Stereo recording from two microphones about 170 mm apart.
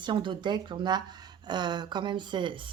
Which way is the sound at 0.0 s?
30° right (ahead or behind).